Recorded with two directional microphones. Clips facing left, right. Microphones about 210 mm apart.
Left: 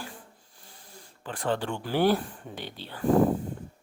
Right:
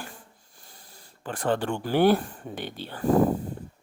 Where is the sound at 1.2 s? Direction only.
45° right (ahead or behind).